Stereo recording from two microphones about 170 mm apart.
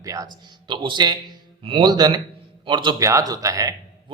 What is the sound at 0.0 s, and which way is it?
A man's voice, 20° right (ahead or behind).